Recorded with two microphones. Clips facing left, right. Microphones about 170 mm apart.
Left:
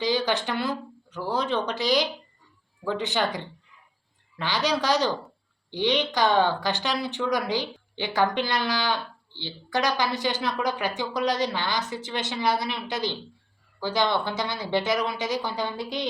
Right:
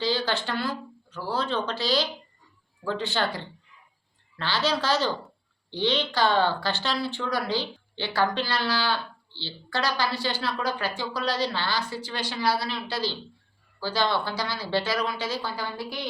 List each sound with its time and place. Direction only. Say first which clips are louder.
0.0 s a woman's voice: left 2 dB; 15° left (ahead or behind)